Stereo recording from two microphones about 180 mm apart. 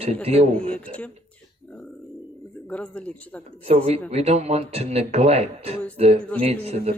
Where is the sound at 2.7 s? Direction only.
5° left (ahead or behind).